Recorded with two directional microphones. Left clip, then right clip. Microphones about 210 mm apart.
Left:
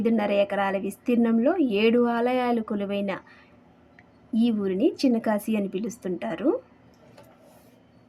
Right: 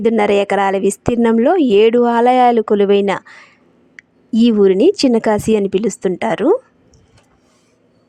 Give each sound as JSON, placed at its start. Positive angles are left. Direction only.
{"t": 0.0, "sound": "a woman's voice", "side_deg": -45}